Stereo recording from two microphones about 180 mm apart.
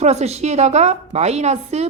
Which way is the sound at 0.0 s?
40° right (ahead or behind).